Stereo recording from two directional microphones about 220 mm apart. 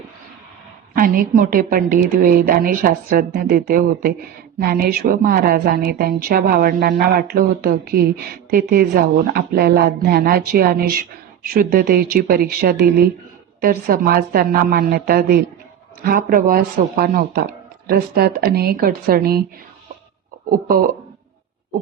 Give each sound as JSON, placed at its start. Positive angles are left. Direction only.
{"t": 0.9, "sound": "a woman's voice", "side_deg": -40}
{"t": 20.5, "sound": "a woman's voice", "side_deg": -40}